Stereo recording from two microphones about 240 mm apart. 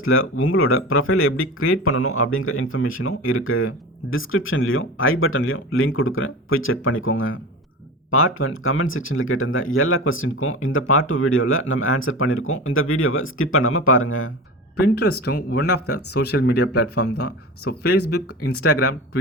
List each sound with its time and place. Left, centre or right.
0.0 s speech: left
14.9 s speech: left
15.7 s speech: left
16.1 s speech: left
17.2 s speech: left
18.4 s speech: left